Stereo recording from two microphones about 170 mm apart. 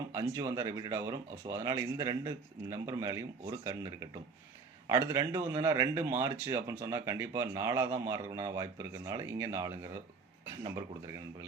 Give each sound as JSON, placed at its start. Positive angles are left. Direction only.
{"t": 0.1, "sound": "speech", "side_deg": -15}